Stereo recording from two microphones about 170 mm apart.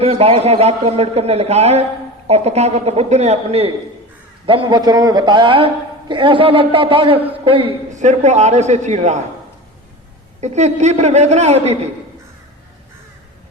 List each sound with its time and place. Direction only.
0.0 s a man's voice: 35° right (ahead or behind)
10.4 s a man's voice: 40° right (ahead or behind)